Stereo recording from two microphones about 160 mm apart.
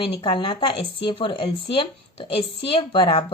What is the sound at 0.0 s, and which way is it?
A woman's voice, 35° left (ahead or behind).